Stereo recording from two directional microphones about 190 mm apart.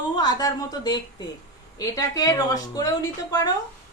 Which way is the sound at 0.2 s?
20° left (ahead or behind).